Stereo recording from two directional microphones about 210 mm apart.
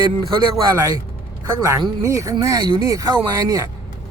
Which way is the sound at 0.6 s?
15° right (ahead or behind).